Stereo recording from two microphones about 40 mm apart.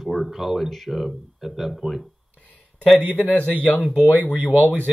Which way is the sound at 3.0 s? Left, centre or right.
Right.